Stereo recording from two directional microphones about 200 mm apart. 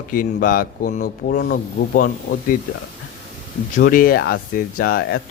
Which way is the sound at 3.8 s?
45° left (ahead or behind).